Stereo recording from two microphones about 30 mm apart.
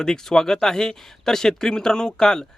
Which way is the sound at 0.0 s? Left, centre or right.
Centre.